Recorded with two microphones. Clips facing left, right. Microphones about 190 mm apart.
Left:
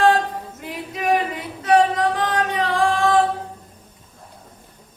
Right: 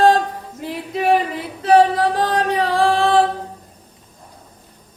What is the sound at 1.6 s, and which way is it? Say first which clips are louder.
Singing: right 3 dB; 35° right (ahead or behind).